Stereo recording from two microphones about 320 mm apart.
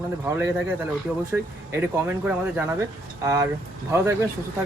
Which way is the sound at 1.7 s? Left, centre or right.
Centre.